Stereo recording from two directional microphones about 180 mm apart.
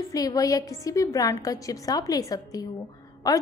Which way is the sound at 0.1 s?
20° left (ahead or behind).